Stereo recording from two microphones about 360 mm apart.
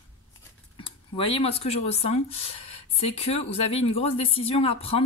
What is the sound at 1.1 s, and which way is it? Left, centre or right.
Speech, centre.